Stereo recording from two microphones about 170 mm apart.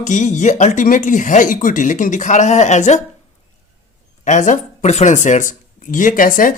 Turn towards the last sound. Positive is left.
turn(degrees=55)  # may be behind; listen again after turning